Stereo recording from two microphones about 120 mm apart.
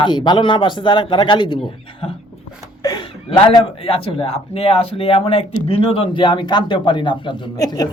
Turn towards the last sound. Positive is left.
turn(degrees=35)  # may be behind; listen again after turning